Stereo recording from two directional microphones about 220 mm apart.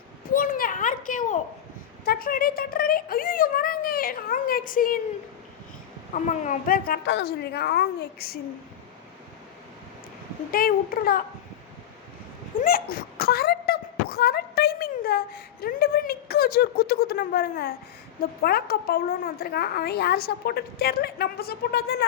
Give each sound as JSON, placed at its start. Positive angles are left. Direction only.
{"t": 0.3, "sound": "a child's voice", "side_deg": 40}
{"t": 6.2, "sound": "a woman's voice", "side_deg": 35}
{"t": 10.5, "sound": "speech", "side_deg": 40}
{"t": 12.5, "sound": "a sound", "side_deg": 40}
{"t": 18.2, "sound": "a woman's voice", "side_deg": 45}